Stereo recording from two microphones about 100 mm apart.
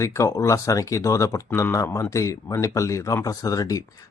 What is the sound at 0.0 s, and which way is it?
Speech, 30° left (ahead or behind).